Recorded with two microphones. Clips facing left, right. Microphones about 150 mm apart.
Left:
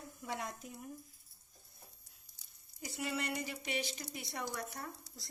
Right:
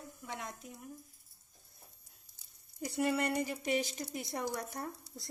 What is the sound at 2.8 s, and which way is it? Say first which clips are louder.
A woman's voice: right 7 dB; 50° right (ahead or behind).